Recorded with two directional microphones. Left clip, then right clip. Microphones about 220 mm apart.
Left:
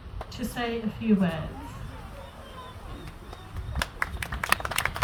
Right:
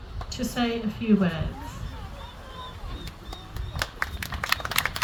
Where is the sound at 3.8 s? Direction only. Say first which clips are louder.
Even; 30° left (ahead or behind).